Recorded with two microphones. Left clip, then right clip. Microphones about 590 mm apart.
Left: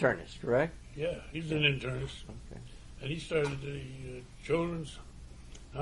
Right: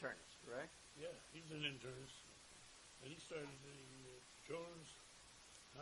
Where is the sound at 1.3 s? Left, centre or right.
Right.